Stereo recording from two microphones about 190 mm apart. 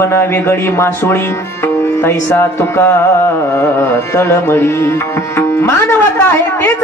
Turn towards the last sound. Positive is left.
turn(degrees=10)  # may be behind; listen again after turning